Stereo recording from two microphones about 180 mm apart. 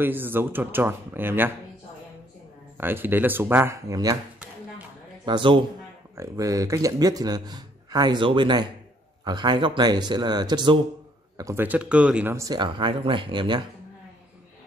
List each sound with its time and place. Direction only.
0.0 s speech: 10° right (ahead or behind)
2.8 s speech: 10° right (ahead or behind)
5.2 s a man's voice: 25° right (ahead or behind)